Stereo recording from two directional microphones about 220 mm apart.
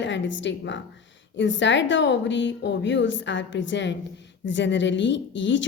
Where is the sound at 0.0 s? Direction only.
55° left (ahead or behind).